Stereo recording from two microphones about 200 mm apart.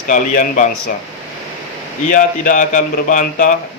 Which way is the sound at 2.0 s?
40° left (ahead or behind).